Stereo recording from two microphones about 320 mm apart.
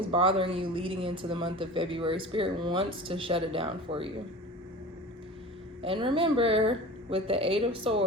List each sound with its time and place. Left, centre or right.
0.0 s speech: centre
5.8 s speech: centre